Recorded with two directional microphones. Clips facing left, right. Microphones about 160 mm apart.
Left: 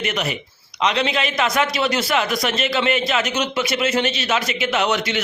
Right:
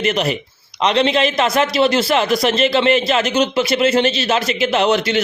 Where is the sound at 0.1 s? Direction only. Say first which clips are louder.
Right 6 dB; 30° right (ahead or behind).